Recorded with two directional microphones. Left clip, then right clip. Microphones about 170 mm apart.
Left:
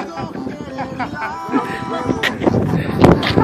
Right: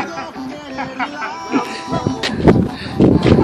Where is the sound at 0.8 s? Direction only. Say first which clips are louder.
Right 1 dB; 55° left (ahead or behind).